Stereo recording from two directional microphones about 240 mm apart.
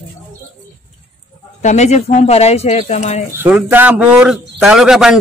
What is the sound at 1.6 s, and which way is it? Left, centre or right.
Speech, left.